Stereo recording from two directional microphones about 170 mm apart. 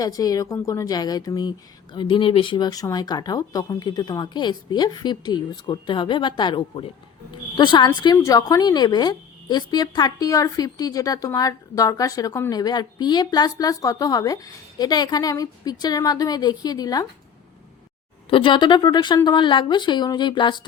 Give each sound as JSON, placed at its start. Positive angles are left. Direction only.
{"t": 0.0, "sound": "speech", "side_deg": 20}
{"t": 18.3, "sound": "speech", "side_deg": 30}